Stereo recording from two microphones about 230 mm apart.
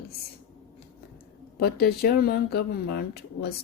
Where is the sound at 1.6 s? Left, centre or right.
Left.